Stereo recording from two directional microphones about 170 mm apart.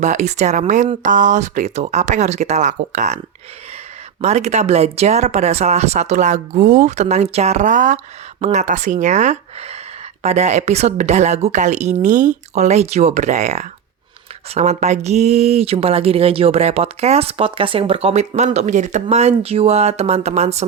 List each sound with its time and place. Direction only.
0.0 s speech: 45° right (ahead or behind)
4.2 s speech: 40° right (ahead or behind)